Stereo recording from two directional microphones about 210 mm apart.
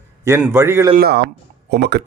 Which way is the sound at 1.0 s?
50° right (ahead or behind).